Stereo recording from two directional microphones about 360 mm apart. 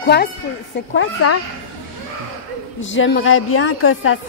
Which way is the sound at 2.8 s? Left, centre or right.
Left.